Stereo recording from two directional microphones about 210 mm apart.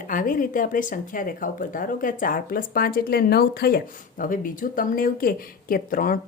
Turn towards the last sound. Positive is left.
turn(degrees=40)  # may be behind; listen again after turning